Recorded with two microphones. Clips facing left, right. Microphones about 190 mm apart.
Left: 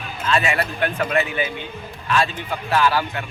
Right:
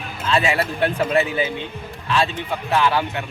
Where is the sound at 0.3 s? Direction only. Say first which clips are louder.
Right 2 dB; 25° right (ahead or behind).